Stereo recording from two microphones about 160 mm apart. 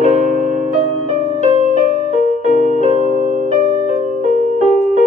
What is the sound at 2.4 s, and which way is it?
Music, 50° right (ahead or behind).